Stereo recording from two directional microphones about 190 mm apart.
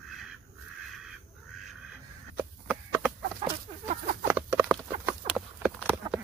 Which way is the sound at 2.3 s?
10° right (ahead or behind).